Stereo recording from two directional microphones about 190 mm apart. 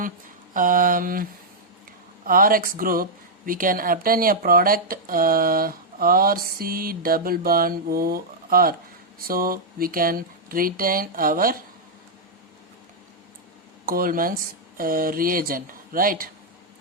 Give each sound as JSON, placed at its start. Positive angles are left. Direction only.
{"t": 0.5, "sound": "speech", "side_deg": -45}
{"t": 13.8, "sound": "speech", "side_deg": -50}